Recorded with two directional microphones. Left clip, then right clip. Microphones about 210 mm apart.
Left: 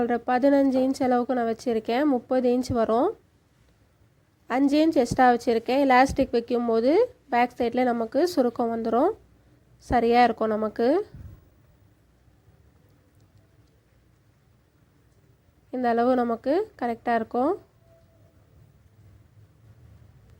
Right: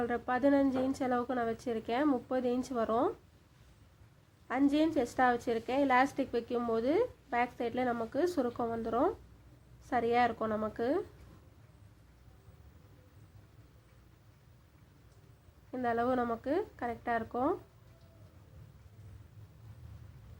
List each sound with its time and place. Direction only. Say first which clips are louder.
0.0 s a woman's voice: left 9 dB; 30° left (ahead or behind)
4.4 s a woman's voice: left 8 dB; 35° left (ahead or behind)
15.7 s a woman's voice: left 9 dB; 35° left (ahead or behind)